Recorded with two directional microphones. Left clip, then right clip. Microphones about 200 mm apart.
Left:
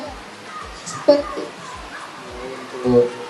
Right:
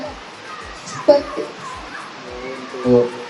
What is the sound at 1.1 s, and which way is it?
Speech, 45° left (ahead or behind).